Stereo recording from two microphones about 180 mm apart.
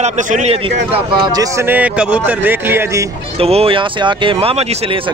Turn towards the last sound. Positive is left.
turn(degrees=-35)  # may be behind; listen again after turning